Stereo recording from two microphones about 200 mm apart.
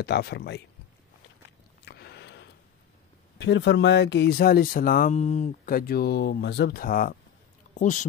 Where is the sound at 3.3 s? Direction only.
60° left (ahead or behind).